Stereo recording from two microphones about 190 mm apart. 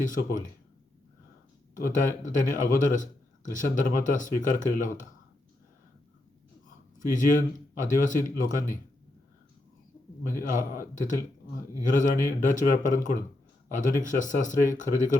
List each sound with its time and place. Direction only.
0.0 s a man's voice: 45° left (ahead or behind)
1.7 s a man's voice: 45° left (ahead or behind)
7.1 s a man's voice: 45° left (ahead or behind)
10.9 s a man's voice: 40° left (ahead or behind)